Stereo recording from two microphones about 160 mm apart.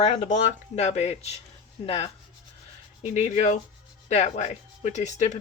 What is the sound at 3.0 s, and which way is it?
Speech, 40° left (ahead or behind).